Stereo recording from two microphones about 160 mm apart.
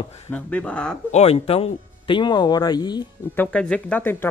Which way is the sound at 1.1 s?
40° left (ahead or behind).